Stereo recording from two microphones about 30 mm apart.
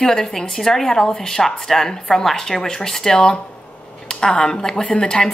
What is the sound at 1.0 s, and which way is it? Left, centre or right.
Speech, left.